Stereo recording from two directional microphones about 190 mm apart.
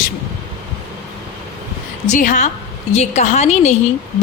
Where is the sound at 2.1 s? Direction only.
40° left (ahead or behind).